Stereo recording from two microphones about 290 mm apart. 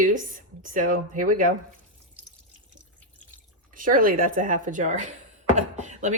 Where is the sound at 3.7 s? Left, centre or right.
Right.